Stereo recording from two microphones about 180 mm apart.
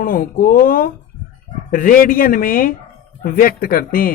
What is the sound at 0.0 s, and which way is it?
Speech, 50° left (ahead or behind).